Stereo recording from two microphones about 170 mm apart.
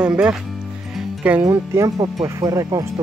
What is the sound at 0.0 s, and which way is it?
Speech, 5° right (ahead or behind).